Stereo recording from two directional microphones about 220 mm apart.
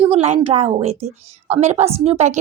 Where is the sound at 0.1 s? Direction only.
25° right (ahead or behind).